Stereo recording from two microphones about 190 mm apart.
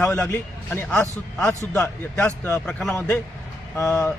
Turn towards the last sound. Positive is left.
turn(degrees=5)  # may be behind; listen again after turning